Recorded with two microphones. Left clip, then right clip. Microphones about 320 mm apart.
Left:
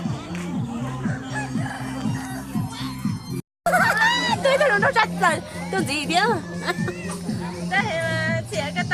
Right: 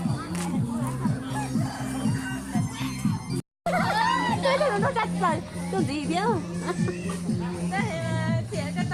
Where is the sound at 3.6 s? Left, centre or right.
Left.